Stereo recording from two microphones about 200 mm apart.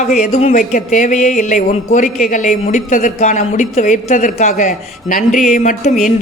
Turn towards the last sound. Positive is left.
turn(degrees=40)  # may be behind; listen again after turning